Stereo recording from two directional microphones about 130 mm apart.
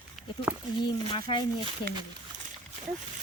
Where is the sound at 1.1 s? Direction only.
35° left (ahead or behind).